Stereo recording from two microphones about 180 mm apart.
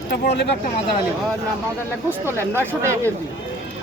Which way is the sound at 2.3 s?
15° left (ahead or behind).